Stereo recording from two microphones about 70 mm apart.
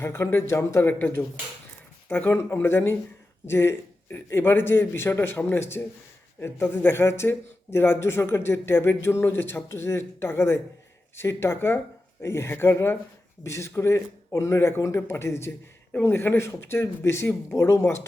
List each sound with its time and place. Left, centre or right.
0.0 s a man's voice: left
0.9 s a man's voice: left